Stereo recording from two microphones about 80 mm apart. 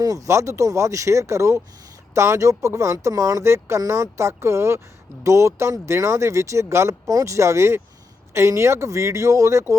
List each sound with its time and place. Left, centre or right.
0.0 s speech: right